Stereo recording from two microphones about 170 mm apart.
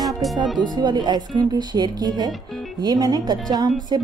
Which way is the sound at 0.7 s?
25° right (ahead or behind).